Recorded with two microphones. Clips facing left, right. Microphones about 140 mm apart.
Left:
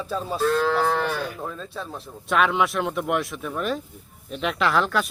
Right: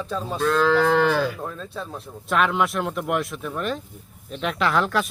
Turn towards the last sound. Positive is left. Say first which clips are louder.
# even
turn(degrees=0)  # may be behind; listen again after turning